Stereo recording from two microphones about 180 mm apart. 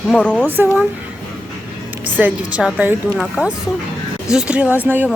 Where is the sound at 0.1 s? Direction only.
5° left (ahead or behind).